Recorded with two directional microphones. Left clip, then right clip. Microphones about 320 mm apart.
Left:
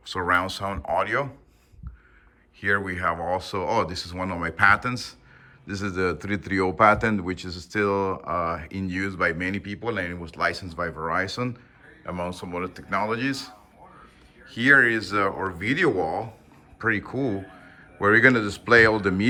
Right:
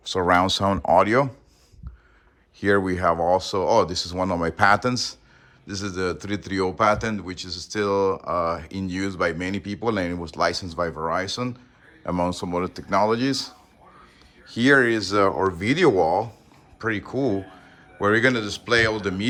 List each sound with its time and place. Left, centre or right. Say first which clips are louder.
0.0 s speech: right 4 dB; centre
2.6 s speech: right 3 dB; centre
12.0 s speech: right 6 dB; centre